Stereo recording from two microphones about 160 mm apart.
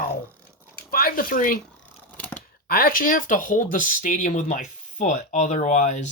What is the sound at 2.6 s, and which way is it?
Speech, 65° left (ahead or behind).